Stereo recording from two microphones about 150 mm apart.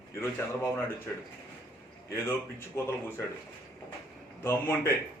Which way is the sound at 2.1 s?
15° left (ahead or behind).